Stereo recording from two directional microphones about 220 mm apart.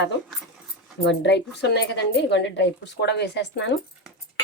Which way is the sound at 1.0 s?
50° left (ahead or behind).